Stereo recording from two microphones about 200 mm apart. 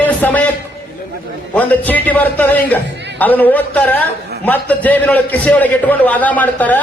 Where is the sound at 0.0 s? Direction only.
10° left (ahead or behind).